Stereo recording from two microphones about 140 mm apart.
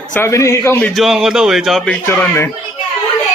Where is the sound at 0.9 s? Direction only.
Centre (ahead or behind); by 2.5 s 15° left (ahead or behind).